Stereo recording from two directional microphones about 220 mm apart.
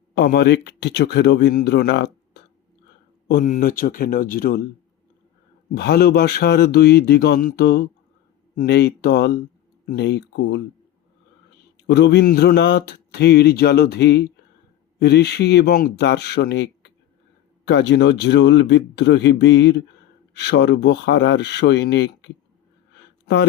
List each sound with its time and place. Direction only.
0.1 s speech: 45° left (ahead or behind)
3.2 s a man's voice: 40° left (ahead or behind)
5.7 s speech: 45° left (ahead or behind)
11.8 s speech: 50° left (ahead or behind)